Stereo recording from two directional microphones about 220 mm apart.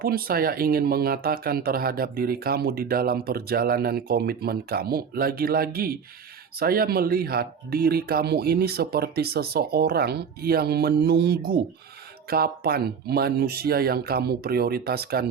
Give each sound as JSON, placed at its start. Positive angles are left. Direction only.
{"t": 0.0, "sound": "speech", "side_deg": -40}